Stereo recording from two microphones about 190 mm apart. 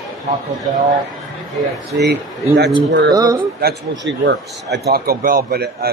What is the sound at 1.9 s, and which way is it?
Speech, 60° right (ahead or behind).